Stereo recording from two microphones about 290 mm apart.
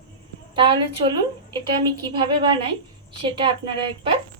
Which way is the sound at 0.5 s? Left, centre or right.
Centre.